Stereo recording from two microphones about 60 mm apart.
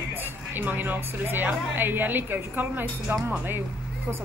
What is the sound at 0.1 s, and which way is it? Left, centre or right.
A woman's voice, right.